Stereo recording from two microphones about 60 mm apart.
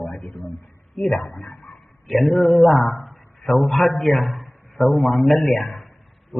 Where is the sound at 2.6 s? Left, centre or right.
Left.